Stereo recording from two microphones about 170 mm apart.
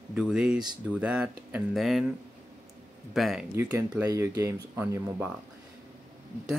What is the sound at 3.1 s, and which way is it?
Speech, centre (ahead or behind).